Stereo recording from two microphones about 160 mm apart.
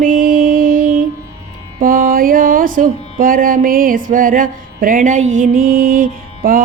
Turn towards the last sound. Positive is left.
turn(degrees=-60)  # may be behind; listen again after turning